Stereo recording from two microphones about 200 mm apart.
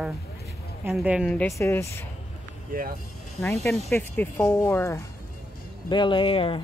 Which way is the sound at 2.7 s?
45° right (ahead or behind).